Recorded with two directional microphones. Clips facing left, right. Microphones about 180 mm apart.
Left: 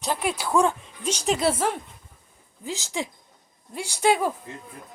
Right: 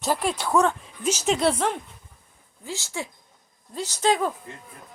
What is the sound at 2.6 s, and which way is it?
A woman's voice, 15° left (ahead or behind).